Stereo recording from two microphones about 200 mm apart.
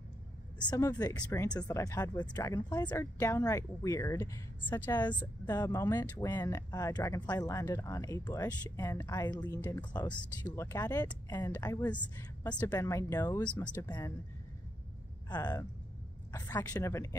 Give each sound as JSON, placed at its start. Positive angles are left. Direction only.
{"t": 0.6, "sound": "speech", "side_deg": 20}
{"t": 13.4, "sound": "speech", "side_deg": 5}
{"t": 13.7, "sound": "speech", "side_deg": 20}
{"t": 15.2, "sound": "speech", "side_deg": 20}